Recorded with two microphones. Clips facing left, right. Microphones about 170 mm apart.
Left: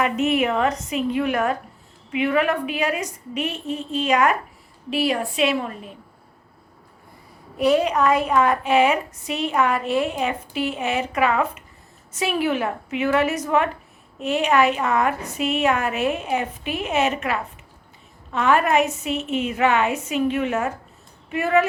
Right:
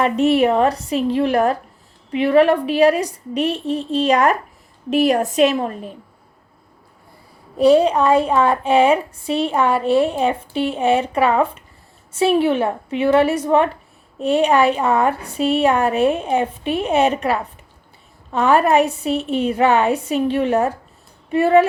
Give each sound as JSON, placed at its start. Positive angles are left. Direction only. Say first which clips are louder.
{"t": 0.0, "sound": "a woman's voice", "louder": "right 5 dB", "side_deg": -35}
{"t": 7.5, "sound": "a woman's voice", "louder": "right 6 dB", "side_deg": -30}